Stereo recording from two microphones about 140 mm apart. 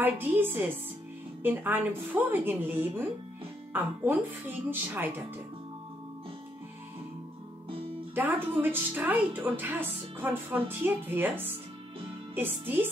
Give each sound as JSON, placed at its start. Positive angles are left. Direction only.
{"t": 0.0, "sound": "speech", "side_deg": -15}
{"t": 8.1, "sound": "speech", "side_deg": -10}